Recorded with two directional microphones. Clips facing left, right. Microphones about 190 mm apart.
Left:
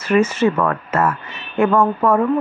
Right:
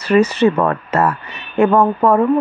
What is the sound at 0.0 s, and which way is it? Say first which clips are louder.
Speech: right 3 dB; 35° right (ahead or behind).